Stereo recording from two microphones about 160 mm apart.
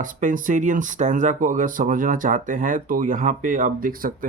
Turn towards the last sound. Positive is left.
turn(degrees=-60)  # may be behind; listen again after turning